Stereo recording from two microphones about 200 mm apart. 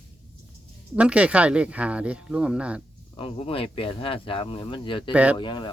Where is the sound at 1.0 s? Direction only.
5° right (ahead or behind).